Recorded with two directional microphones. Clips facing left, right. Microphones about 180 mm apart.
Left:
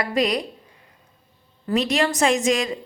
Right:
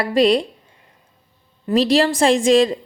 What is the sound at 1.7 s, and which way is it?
A woman's voice, 30° right (ahead or behind).